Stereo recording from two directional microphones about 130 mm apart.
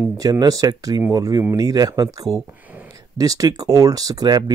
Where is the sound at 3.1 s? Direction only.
25° right (ahead or behind).